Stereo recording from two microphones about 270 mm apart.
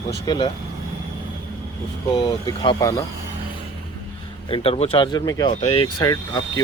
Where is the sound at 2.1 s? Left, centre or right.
Centre.